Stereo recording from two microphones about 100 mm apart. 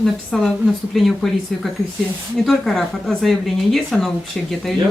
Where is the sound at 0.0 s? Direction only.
5° left (ahead or behind).